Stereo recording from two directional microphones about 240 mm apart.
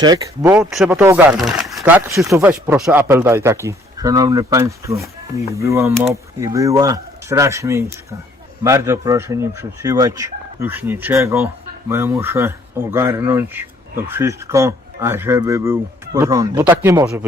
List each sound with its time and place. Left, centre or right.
0.0 s speech: centre